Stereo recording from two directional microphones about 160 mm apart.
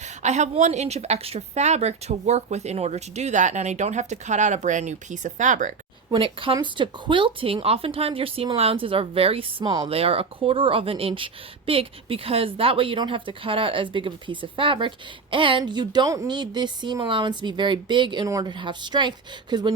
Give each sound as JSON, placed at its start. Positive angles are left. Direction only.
{"t": 0.0, "sound": "a woman's voice", "side_deg": -45}
{"t": 6.1, "sound": "speech", "side_deg": -30}
{"t": 9.9, "sound": "speech", "side_deg": -35}